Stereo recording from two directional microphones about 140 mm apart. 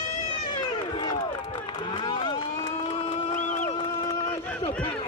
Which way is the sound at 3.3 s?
65° left (ahead or behind).